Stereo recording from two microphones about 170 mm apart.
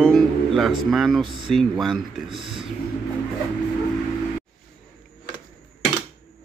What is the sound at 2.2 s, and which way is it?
Speech, 30° right (ahead or behind).